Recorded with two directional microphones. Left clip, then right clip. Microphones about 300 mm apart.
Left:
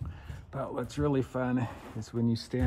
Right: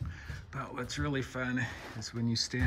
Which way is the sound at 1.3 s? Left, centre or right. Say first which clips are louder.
Left 3 dB; left.